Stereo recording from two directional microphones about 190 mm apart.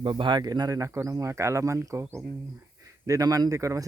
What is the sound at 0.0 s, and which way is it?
Speech, 25° right (ahead or behind).